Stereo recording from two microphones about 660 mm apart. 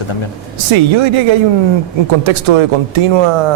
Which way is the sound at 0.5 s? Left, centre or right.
Right.